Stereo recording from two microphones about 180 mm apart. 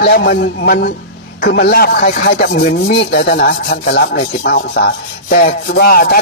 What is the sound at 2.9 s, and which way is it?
Rub, 70° left (ahead or behind).